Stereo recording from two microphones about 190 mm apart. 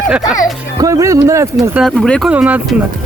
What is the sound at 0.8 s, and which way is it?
Speech, 20° right (ahead or behind).